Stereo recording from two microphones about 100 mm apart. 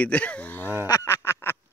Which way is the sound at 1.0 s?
25° left (ahead or behind).